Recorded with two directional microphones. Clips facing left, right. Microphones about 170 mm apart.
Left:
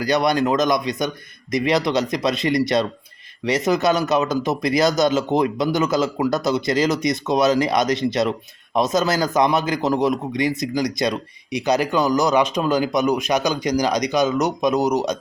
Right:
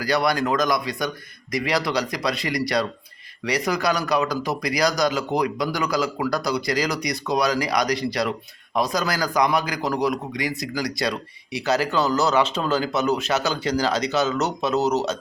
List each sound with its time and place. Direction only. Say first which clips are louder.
0.0 s a man's voice: left 3 dB; 20° left (ahead or behind)